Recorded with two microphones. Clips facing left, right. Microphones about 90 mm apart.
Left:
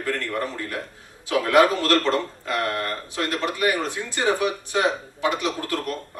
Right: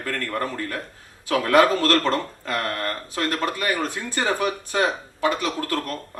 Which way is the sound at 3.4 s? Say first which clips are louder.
Left 1 dB; 20° left (ahead or behind).